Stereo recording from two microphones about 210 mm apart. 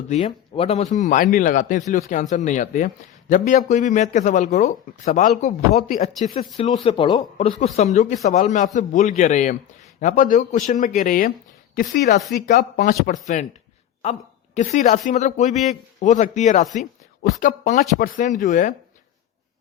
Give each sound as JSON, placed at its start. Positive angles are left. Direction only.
{"t": 0.1, "sound": "a man's voice", "side_deg": 30}
{"t": 6.8, "sound": "speech", "side_deg": 25}
{"t": 7.6, "sound": "a man's voice", "side_deg": 35}
{"t": 12.5, "sound": "a man's voice", "side_deg": 40}